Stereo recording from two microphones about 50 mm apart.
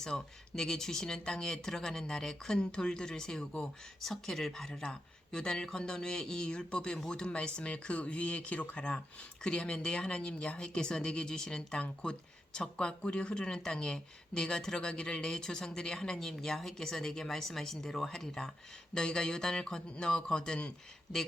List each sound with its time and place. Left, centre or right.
0.0 s speech: centre
4.0 s speech: centre